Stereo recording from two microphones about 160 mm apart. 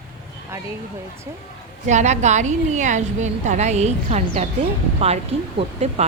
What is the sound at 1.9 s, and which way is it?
A woman's voice, 45° right (ahead or behind).